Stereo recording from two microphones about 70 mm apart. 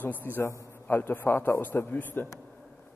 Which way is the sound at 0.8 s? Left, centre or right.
Left.